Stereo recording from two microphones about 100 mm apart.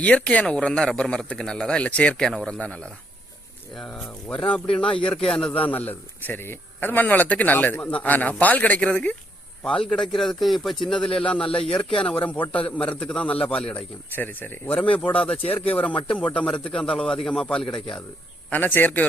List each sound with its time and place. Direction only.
0.0 s speech: 15° left (ahead or behind)
5.9 s speech: 20° left (ahead or behind); by 17.8 s 5° left (ahead or behind)
18.5 s speech: 20° left (ahead or behind)